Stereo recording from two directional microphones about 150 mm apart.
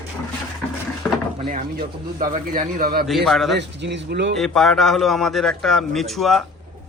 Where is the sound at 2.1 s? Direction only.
65° right (ahead or behind); by 3.1 s 80° right.